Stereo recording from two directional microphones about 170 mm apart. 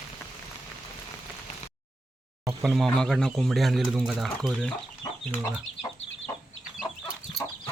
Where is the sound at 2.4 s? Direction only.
Centre (ahead or behind).